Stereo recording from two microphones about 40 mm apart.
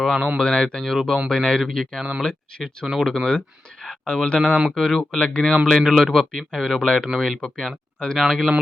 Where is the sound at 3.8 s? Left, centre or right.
Left.